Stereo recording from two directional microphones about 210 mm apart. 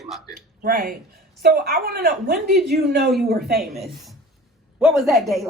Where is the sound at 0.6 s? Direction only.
45° right (ahead or behind).